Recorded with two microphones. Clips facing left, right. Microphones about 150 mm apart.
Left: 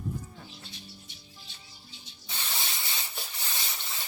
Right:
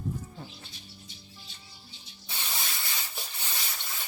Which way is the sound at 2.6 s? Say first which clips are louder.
Even; 25° left (ahead or behind).